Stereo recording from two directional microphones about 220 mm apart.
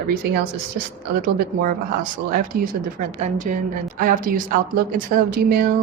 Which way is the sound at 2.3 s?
40° right (ahead or behind).